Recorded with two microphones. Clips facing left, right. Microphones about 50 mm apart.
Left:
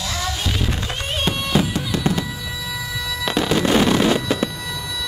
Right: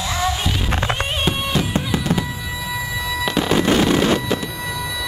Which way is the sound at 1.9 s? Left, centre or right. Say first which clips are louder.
Left 4 dB; centre.